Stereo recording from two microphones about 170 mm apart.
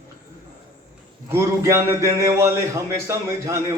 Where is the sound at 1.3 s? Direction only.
15° right (ahead or behind).